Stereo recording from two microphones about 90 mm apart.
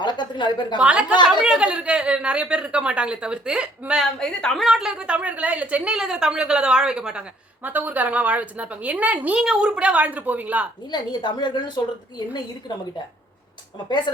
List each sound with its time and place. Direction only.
0.0 s a sound: 60° left (ahead or behind)
0.8 s a woman's voice: 10° right (ahead or behind)
4.2 s a woman's voice: 5° left (ahead or behind); by 10.7 s 15° right (ahead or behind)
10.9 s speech: 55° left (ahead or behind)